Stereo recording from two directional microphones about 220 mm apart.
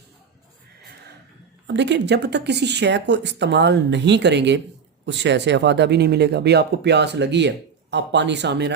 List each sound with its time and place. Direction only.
1.6 s speech: 55° right (ahead or behind)